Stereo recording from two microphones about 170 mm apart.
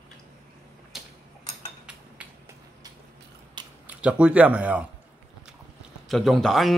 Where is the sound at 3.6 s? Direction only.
25° right (ahead or behind).